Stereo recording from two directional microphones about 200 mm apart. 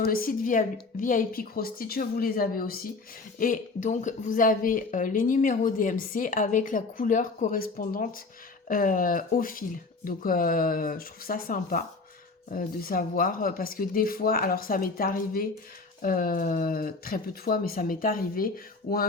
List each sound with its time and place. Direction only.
0.0 s speech: 45° left (ahead or behind)